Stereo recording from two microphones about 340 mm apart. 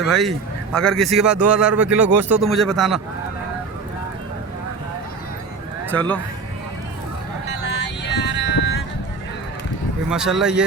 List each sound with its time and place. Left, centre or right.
0.1 s a man's voice: centre
5.9 s a man's voice: centre
7.5 s vehicle: left
10.1 s a man's voice: centre